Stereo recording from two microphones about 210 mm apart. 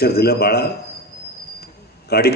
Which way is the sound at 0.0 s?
50° left (ahead or behind).